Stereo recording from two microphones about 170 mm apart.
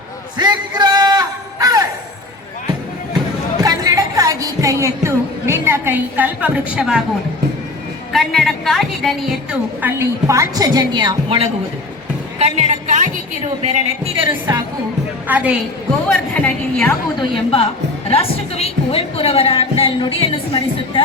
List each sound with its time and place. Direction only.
0.3 s a sound: 25° right (ahead or behind)
3.6 s a sound: 20° right (ahead or behind); by 7.0 s 5° right (ahead or behind)
8.1 s a woman's voice: centre (ahead or behind); by 11.4 s 30° right (ahead or behind)
12.4 s a woman's voice: 40° right (ahead or behind)
14.5 s speech: 25° right (ahead or behind)
15.3 s a woman's voice: 10° right (ahead or behind)
16.0 s a woman's voice: 5° left (ahead or behind)
17.2 s a woman's voice: 35° left (ahead or behind)